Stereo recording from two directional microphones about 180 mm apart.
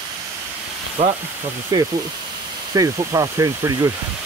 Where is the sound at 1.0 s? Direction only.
35° right (ahead or behind).